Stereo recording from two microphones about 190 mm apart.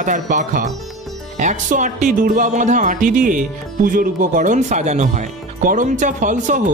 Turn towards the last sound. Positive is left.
turn(degrees=-40)  # may be behind; listen again after turning